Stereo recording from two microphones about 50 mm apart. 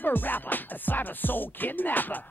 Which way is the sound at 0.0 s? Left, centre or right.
Left.